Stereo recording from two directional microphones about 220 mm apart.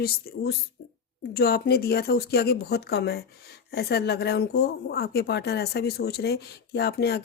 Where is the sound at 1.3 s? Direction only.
45° left (ahead or behind).